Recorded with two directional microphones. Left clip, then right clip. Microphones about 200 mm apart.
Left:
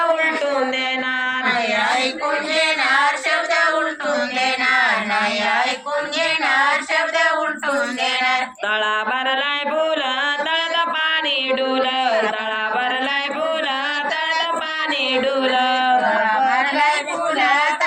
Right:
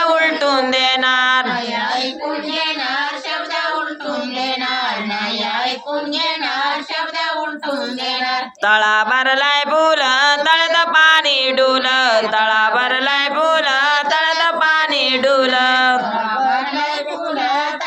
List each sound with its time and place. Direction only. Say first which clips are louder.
8.6 s mantra: right 10 dB; 15° right (ahead or behind)
11.5 s a sound: right 5 dB; 20° right (ahead or behind)
13.4 s music: right 6 dB; 25° right (ahead or behind)